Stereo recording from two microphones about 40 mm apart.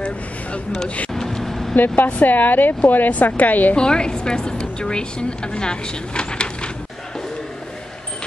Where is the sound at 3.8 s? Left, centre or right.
Left.